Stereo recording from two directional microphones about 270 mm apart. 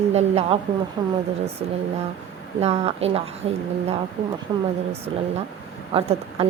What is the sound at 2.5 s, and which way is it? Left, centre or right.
A woman's voice, right.